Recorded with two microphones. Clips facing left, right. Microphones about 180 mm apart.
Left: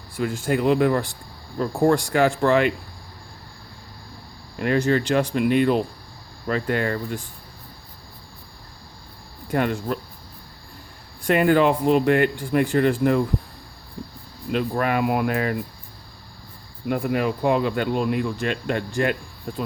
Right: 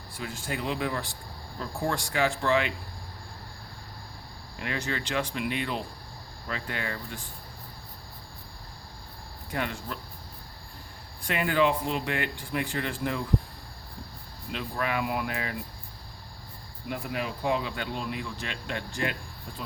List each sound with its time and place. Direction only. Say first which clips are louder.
0.2 s speech: left 12 dB; 50° left (ahead or behind)
4.6 s speech: left 13 dB; 45° left (ahead or behind)
9.5 s speech: left 10 dB; 50° left (ahead or behind)
11.3 s speech: left 8 dB; 50° left (ahead or behind)
14.5 s speech: left 9 dB; 50° left (ahead or behind)
16.9 s speech: left 10 dB; 55° left (ahead or behind)